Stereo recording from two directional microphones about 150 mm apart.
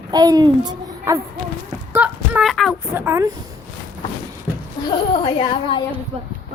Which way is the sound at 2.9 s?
20° right (ahead or behind).